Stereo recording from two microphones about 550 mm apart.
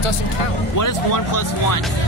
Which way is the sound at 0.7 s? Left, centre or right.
Left.